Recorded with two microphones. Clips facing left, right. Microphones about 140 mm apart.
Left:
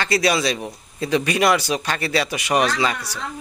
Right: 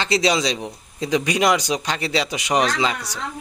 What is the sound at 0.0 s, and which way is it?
Speech, 20° right (ahead or behind).